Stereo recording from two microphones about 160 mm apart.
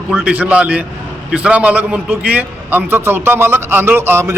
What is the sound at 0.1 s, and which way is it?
A man's voice, 10° right (ahead or behind).